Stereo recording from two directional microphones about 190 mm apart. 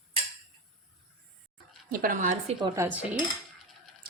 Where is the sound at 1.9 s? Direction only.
45° right (ahead or behind).